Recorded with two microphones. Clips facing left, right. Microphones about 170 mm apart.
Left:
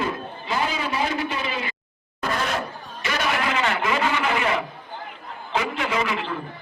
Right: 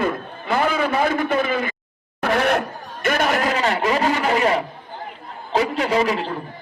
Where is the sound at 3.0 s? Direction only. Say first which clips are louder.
Right 5 dB; 50° right (ahead or behind).